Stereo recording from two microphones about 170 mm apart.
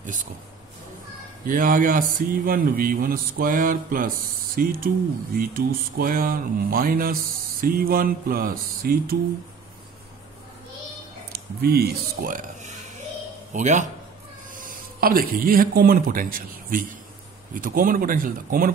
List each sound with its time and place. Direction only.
1.5 s a man's voice: 55° right (ahead or behind)
11.3 s a man's voice: 65° right (ahead or behind)